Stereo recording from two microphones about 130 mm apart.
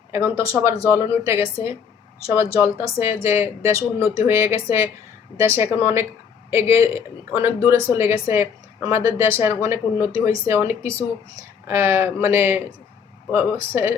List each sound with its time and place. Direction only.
0.1 s speech: 20° right (ahead or behind)